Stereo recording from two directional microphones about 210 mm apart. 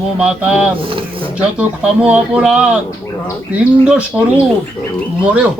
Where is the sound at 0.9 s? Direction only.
25° right (ahead or behind).